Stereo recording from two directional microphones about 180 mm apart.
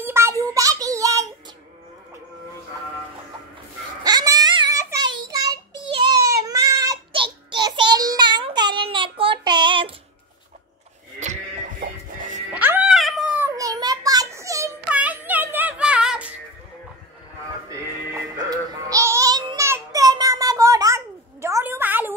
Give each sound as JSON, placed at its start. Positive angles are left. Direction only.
{"t": 0.0, "sound": "a sound", "side_deg": -15}
{"t": 4.0, "sound": "a sound", "side_deg": -20}
{"t": 6.3, "sound": "child singing", "side_deg": -20}
{"t": 11.8, "sound": "music", "side_deg": -45}
{"t": 12.5, "sound": "cat", "side_deg": -10}
{"t": 17.6, "sound": "music", "side_deg": -20}